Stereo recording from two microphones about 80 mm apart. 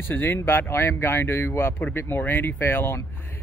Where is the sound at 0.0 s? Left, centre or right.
Left.